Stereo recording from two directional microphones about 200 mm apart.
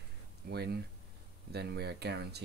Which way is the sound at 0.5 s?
55° right (ahead or behind).